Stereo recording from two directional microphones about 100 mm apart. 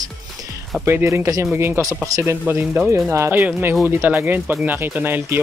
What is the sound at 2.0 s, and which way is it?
Speech, 35° right (ahead or behind).